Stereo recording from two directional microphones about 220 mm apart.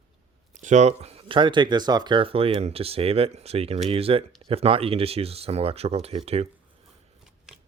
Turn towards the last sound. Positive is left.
turn(degrees=-30)  # may be behind; listen again after turning